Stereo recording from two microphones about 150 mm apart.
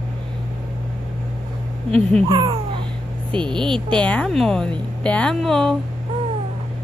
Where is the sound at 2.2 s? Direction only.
30° right (ahead or behind).